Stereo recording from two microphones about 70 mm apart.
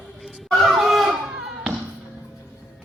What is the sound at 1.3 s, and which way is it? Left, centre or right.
Music, centre.